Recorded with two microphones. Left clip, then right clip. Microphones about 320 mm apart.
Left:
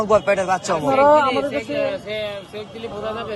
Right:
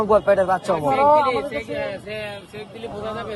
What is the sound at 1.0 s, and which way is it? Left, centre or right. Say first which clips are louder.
Speech: left 2 dB; left.